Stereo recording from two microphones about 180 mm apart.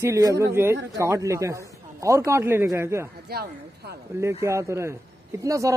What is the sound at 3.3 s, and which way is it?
Speech, 60° right (ahead or behind).